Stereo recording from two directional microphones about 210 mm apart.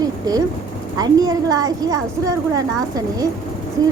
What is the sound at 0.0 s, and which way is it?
A woman's voice, 15° right (ahead or behind).